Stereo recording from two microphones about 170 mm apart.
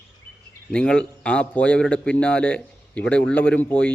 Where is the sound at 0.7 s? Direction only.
5° left (ahead or behind).